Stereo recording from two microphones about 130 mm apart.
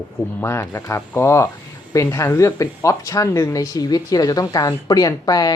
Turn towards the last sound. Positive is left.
turn(degrees=30)  # may be behind; listen again after turning